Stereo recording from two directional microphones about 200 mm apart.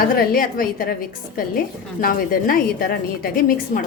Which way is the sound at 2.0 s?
45° left (ahead or behind).